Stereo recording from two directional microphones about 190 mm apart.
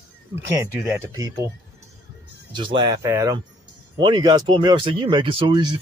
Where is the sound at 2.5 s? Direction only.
25° right (ahead or behind).